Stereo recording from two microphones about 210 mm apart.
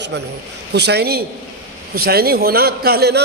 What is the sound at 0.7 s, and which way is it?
A man's voice, 50° right (ahead or behind).